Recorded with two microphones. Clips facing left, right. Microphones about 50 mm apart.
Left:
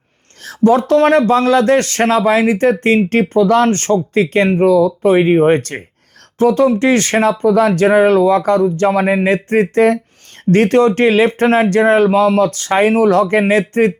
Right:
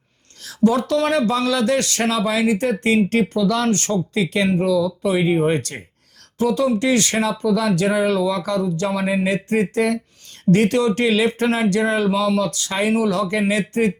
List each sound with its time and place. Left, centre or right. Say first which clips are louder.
0.4 s speech: left 6 dB; left